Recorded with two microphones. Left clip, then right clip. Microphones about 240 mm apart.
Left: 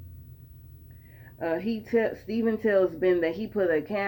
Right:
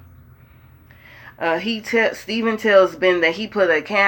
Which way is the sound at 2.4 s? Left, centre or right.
Centre.